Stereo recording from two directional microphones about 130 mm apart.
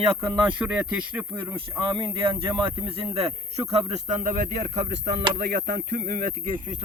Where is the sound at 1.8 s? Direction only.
40° right (ahead or behind); by 4.4 s 80° right.